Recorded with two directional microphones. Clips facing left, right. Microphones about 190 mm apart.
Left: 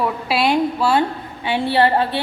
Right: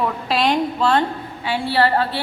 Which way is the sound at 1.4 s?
20° left (ahead or behind).